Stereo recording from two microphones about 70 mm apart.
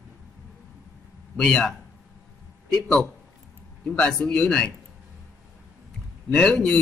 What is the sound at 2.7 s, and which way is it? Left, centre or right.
A man's voice, centre.